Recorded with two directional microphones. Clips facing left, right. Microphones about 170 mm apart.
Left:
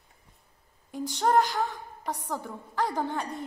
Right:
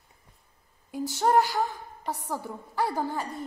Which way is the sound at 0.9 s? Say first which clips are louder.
Right 1 dB; 5° right (ahead or behind).